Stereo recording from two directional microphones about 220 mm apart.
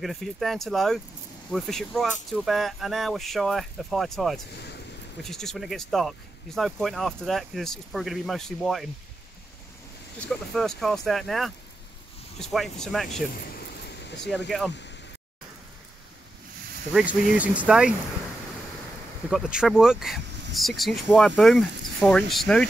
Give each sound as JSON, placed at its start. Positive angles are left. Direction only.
{"t": 0.0, "sound": "speech", "side_deg": 0}
{"t": 10.2, "sound": "speech", "side_deg": 0}
{"t": 13.6, "sound": "a sound", "side_deg": 50}
{"t": 16.9, "sound": "speech", "side_deg": -5}
{"t": 19.3, "sound": "speech", "side_deg": -5}